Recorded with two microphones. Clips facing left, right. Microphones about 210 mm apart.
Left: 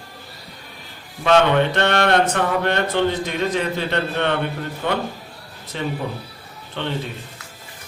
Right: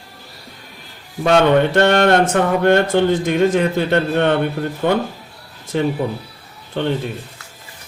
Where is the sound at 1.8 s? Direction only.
45° right (ahead or behind).